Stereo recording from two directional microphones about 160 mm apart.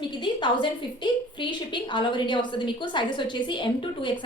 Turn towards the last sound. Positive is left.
turn(degrees=30)  # may be behind; listen again after turning